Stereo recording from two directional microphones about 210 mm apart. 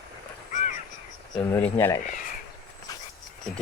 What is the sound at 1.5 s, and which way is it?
Speech, 10° left (ahead or behind).